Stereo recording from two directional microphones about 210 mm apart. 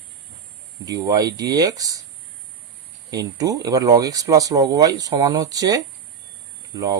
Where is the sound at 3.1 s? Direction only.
15° right (ahead or behind).